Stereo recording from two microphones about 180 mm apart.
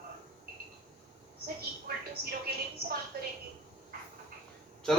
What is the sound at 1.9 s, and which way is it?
Television, 55° right (ahead or behind).